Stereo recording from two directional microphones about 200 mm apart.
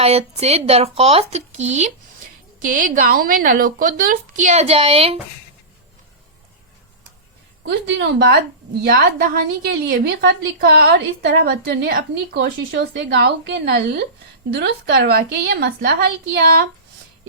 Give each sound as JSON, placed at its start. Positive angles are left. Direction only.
{"t": 0.0, "sound": "speech", "side_deg": -30}
{"t": 7.6, "sound": "a woman's voice", "side_deg": -65}